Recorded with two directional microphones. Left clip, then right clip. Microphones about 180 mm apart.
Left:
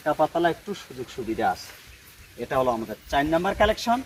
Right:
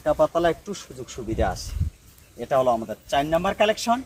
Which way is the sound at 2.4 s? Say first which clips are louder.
Right 3 dB; 60° right (ahead or behind).